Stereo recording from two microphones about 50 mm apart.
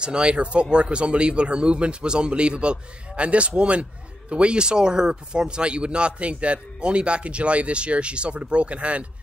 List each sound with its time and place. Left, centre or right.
0.0 s speech: centre